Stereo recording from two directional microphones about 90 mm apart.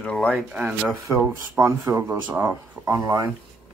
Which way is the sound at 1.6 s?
30° right (ahead or behind).